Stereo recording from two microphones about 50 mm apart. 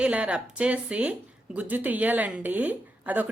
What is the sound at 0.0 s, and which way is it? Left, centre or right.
A woman's voice, right.